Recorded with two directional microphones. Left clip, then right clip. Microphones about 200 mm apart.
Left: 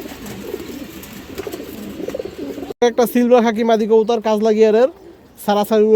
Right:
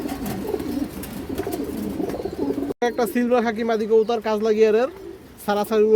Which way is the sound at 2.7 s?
45° left (ahead or behind).